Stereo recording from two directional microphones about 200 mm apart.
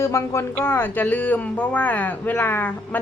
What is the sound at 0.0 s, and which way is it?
Speech, 15° left (ahead or behind).